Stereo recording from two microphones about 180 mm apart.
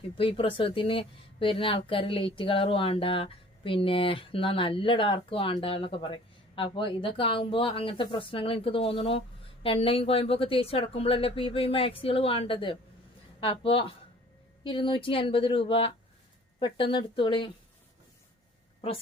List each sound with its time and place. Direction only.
0.2 s a woman's voice: 30° left (ahead or behind)